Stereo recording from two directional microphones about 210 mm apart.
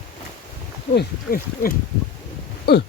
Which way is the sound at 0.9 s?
45° left (ahead or behind).